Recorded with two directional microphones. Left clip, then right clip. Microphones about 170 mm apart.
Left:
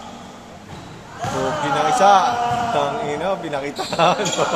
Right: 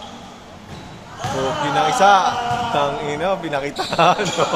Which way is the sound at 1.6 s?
40° right (ahead or behind).